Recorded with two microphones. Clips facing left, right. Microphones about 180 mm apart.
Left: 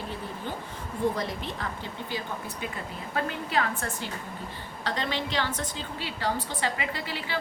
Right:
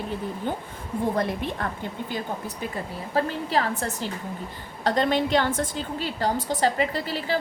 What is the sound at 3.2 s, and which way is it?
A woman's voice, 35° right (ahead or behind).